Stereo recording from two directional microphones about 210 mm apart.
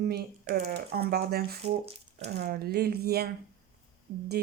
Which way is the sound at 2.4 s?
50° right (ahead or behind).